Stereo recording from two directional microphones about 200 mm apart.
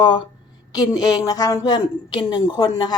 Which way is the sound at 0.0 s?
20° left (ahead or behind).